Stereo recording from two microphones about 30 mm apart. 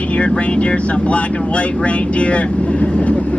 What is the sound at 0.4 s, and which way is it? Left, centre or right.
Speech, left.